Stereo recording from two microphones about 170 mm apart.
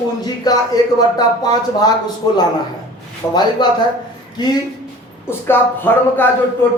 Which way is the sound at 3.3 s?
25° left (ahead or behind).